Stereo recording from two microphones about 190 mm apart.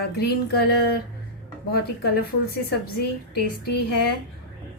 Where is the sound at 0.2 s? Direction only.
55° left (ahead or behind).